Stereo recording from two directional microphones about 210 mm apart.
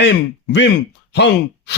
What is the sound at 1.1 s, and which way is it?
Speech, 55° left (ahead or behind).